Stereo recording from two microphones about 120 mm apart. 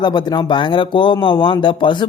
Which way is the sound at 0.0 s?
35° left (ahead or behind).